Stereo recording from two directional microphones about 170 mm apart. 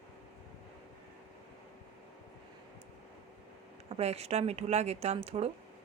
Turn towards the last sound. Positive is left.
turn(degrees=-35)  # may be behind; listen again after turning